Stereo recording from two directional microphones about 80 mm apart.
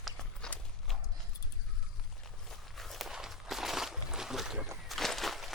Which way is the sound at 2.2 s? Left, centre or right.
Centre.